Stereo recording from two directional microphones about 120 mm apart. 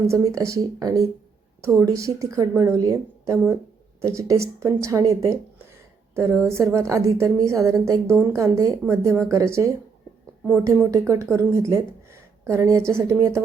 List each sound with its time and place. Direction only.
0.1 s a woman's voice: 30° right (ahead or behind)